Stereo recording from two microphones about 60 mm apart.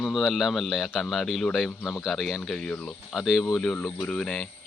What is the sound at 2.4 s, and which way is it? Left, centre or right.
Speech, centre.